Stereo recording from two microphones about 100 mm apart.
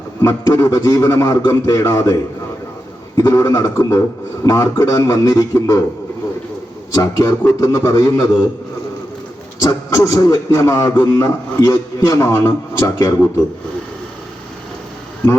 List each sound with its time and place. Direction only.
0.2 s a man's voice: 35° left (ahead or behind)
3.2 s a man's voice: 35° left (ahead or behind)
6.9 s a man's voice: 35° left (ahead or behind)
9.6 s a man's voice: 30° left (ahead or behind)